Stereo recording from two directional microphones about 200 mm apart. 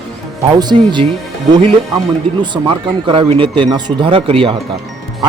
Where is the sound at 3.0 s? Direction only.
25° right (ahead or behind).